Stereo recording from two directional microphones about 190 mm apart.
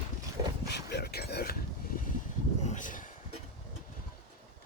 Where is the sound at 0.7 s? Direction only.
60° left (ahead or behind); by 3.1 s 45° left (ahead or behind).